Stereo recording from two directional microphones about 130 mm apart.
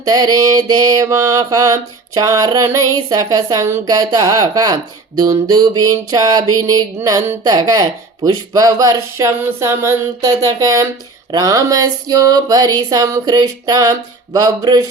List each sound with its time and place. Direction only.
0.0 s mantra: 30° right (ahead or behind)